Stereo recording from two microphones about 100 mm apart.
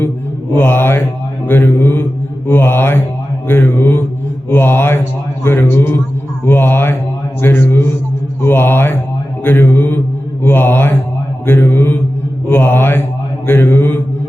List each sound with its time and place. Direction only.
0.5 s speech: 20° left (ahead or behind)